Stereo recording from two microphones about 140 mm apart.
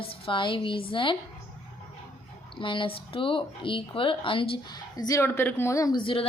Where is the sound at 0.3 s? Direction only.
35° left (ahead or behind).